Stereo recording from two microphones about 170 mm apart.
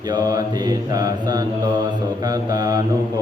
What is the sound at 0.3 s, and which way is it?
Mantra, 20° right (ahead or behind).